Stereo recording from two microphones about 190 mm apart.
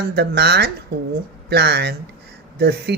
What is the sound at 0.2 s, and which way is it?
Speech, 60° right (ahead or behind).